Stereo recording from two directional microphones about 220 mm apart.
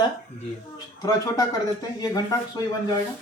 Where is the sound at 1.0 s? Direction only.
15° left (ahead or behind).